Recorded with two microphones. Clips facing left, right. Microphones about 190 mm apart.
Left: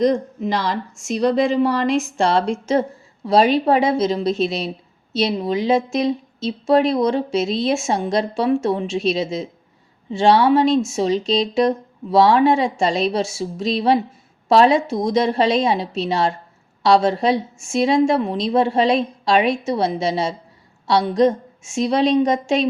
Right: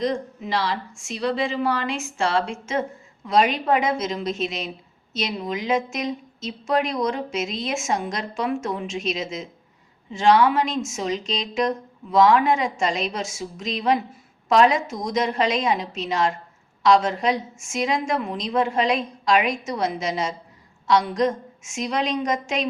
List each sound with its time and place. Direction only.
0.0 s a woman's voice: 40° left (ahead or behind)